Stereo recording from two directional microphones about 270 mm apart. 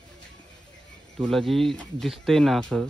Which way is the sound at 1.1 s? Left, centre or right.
Centre.